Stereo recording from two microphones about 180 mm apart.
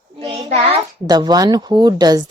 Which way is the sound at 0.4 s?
35° right (ahead or behind).